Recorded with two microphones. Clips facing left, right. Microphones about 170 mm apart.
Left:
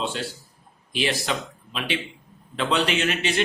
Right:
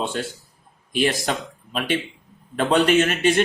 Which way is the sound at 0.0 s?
50° right (ahead or behind).